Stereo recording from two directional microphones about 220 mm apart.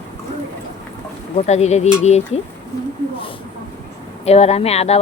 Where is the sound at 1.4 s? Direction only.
30° left (ahead or behind).